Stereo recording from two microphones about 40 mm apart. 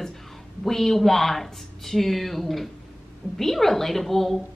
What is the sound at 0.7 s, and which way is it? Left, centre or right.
Speech, centre.